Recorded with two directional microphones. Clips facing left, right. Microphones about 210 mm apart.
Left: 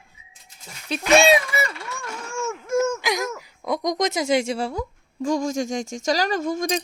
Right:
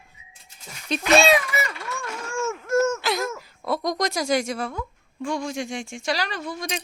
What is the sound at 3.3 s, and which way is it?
Speech, 15° left (ahead or behind).